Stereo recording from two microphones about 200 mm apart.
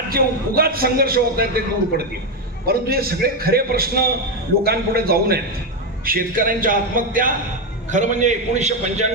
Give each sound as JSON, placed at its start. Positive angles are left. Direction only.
{"t": 0.1, "sound": "a man's voice", "side_deg": -50}
{"t": 2.6, "sound": "a man's voice", "side_deg": -50}